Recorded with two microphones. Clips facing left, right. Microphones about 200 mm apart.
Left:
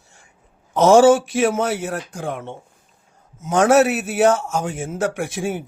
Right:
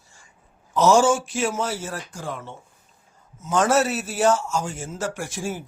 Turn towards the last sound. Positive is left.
turn(degrees=60)  # may be behind; listen again after turning